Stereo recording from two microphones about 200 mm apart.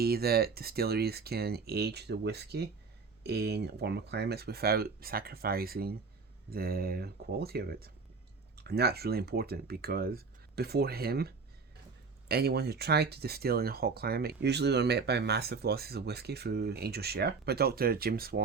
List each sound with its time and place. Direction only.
0.0 s speech: 50° right (ahead or behind)
12.3 s speech: 50° right (ahead or behind)